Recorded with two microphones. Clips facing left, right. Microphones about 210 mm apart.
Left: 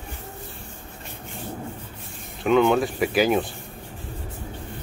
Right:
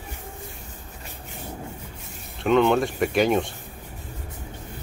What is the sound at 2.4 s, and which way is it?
Speech, centre (ahead or behind).